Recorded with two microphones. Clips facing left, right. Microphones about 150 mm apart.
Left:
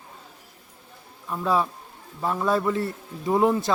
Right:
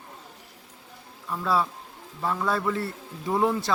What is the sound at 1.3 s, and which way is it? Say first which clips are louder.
Speech: left 2 dB; 15° left (ahead or behind).